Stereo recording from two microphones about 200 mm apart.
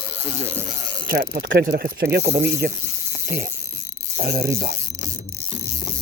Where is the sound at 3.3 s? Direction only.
50° right (ahead or behind).